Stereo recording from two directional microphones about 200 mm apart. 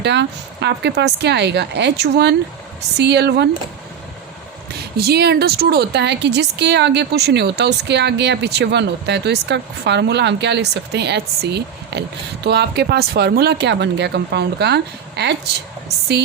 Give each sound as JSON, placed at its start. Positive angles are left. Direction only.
{"t": 0.0, "sound": "a woman's voice", "side_deg": -60}
{"t": 4.9, "sound": "a woman's voice", "side_deg": -50}